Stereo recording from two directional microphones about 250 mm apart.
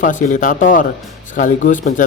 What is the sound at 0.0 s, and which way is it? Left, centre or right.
Speech, left.